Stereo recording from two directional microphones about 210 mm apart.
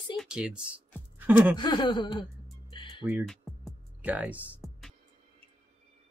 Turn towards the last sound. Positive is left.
turn(degrees=-5)  # may be behind; listen again after turning